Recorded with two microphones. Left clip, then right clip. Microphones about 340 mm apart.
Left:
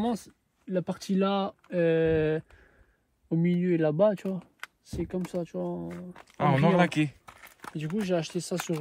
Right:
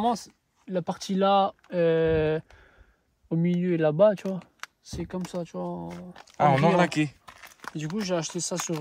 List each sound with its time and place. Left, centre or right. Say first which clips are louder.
0.0 s speech: right 6 dB; right
5.9 s speech: right 6 dB; centre